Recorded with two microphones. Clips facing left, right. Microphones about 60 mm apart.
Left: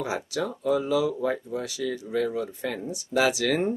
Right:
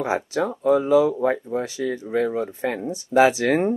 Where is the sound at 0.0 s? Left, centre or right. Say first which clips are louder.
Right 6 dB; right.